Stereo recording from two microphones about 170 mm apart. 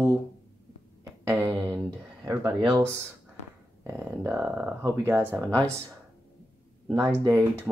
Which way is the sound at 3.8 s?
10° right (ahead or behind).